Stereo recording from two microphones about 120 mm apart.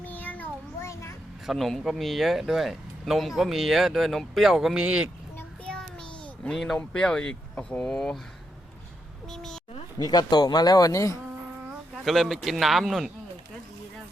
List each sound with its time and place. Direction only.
0.0 s child singing: 15° left (ahead or behind)
1.5 s speech: centre (ahead or behind)
5.4 s child singing: 10° left (ahead or behind)
6.5 s speech: centre (ahead or behind)
9.3 s speech: 5° left (ahead or behind)
10.0 s speech: 35° left (ahead or behind)
12.0 s speech: centre (ahead or behind)